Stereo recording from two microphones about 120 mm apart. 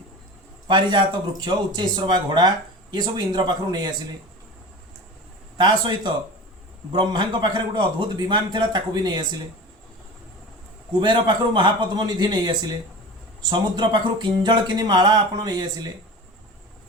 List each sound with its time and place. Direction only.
0.7 s speech: 40° right (ahead or behind)
5.5 s speech: 40° right (ahead or behind)
11.0 s speech: 40° right (ahead or behind)